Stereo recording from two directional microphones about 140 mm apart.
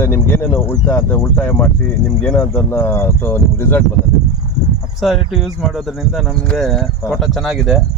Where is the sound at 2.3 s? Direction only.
20° left (ahead or behind).